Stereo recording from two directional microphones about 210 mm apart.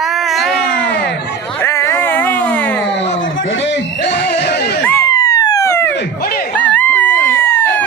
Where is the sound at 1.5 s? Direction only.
15° left (ahead or behind).